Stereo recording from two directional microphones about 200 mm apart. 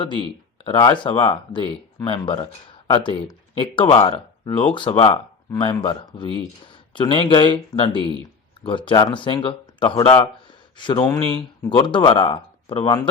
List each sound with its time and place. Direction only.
0.0 s speech: 25° left (ahead or behind)